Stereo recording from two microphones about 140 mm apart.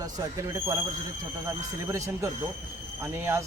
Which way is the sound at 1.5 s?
20° right (ahead or behind).